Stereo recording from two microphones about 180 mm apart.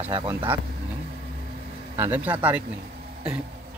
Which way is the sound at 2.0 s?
10° right (ahead or behind).